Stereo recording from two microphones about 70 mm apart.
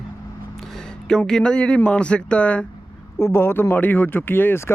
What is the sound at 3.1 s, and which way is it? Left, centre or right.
Speech, left.